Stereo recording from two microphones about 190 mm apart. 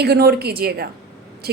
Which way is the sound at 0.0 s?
55° right (ahead or behind).